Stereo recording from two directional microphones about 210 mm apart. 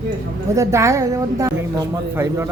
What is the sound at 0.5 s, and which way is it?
A man's voice, 15° right (ahead or behind).